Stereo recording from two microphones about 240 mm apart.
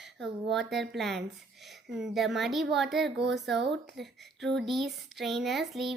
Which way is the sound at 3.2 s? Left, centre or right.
Right.